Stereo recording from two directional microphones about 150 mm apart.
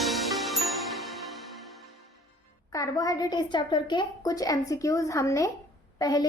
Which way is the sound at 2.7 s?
25° left (ahead or behind).